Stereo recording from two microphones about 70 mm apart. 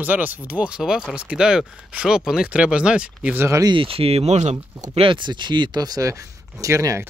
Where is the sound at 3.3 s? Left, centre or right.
Right.